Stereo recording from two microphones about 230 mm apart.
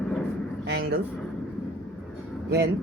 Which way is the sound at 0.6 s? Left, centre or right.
Right.